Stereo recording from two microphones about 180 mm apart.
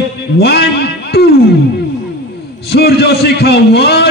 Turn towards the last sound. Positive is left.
turn(degrees=65)  # may be behind; listen again after turning